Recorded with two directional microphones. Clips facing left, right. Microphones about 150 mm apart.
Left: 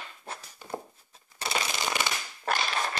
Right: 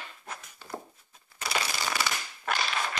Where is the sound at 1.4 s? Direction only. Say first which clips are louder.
Left 1 dB; 25° left (ahead or behind).